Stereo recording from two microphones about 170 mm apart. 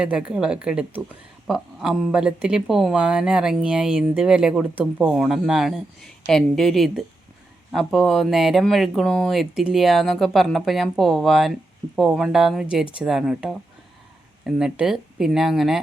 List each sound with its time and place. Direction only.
0.0 s speech: 5° right (ahead or behind)